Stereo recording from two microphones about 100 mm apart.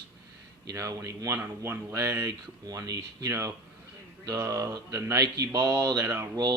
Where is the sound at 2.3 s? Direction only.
40° right (ahead or behind).